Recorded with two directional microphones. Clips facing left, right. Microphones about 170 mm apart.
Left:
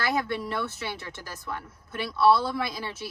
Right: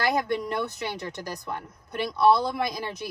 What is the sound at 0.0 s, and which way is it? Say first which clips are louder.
Speech: right 3 dB; 15° right (ahead or behind).